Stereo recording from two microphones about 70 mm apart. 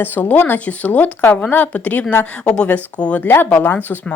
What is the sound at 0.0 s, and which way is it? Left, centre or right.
A woman's voice, left.